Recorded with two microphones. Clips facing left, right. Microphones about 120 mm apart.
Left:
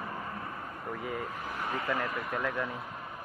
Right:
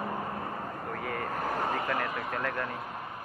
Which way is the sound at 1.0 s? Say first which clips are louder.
Right 1 dB; 75° right (ahead or behind).